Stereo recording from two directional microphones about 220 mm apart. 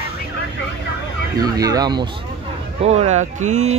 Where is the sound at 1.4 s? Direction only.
15° right (ahead or behind).